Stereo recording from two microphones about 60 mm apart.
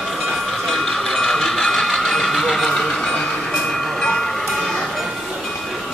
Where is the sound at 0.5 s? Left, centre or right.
Centre.